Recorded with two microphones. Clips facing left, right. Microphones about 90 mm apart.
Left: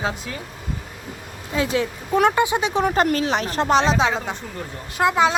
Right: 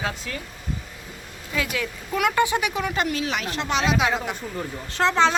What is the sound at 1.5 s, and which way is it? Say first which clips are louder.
Speech: left 5 dB; 30° left (ahead or behind).